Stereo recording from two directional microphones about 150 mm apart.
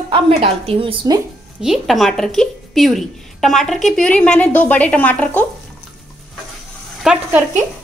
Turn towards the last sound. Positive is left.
turn(degrees=-5)  # may be behind; listen again after turning